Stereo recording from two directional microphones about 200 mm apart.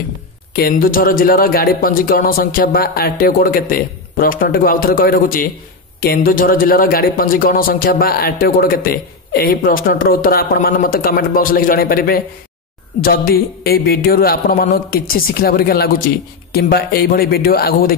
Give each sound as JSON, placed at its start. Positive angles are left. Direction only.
{"t": 0.5, "sound": "speech", "side_deg": 50}